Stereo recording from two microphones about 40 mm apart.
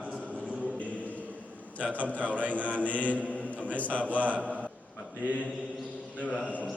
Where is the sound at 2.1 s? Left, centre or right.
Left.